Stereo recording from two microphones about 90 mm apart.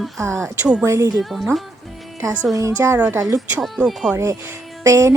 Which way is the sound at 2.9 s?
20° right (ahead or behind).